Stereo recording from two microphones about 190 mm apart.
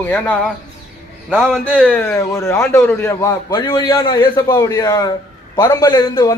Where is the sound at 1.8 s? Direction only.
10° left (ahead or behind).